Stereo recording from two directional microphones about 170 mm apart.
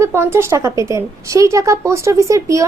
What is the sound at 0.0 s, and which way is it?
Speech, 15° right (ahead or behind).